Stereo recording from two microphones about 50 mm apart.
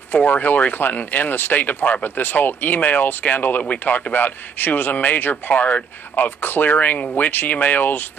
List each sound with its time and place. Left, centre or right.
0.1 s speech: left